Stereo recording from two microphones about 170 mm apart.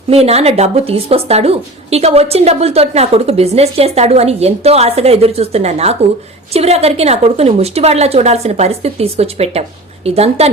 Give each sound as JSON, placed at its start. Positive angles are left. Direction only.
{"t": 0.1, "sound": "speech", "side_deg": -35}